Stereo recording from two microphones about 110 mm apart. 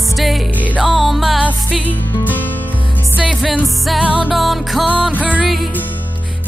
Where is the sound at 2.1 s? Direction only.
15° left (ahead or behind).